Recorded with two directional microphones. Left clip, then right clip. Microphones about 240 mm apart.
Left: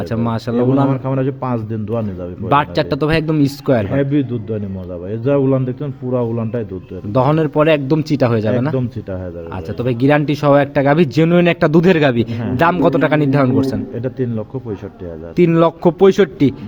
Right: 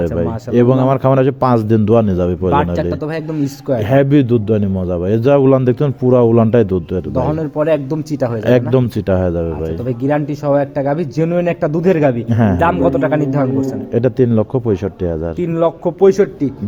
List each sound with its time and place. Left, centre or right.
0.5 s a man's voice: right
2.5 s a man's voice: left
3.8 s a man's voice: right
7.3 s a man's voice: left
8.7 s a man's voice: right
9.8 s a man's voice: left
13.9 s speech: right
15.4 s a man's voice: left